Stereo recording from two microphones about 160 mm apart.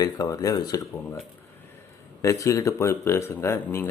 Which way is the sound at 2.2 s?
20° left (ahead or behind).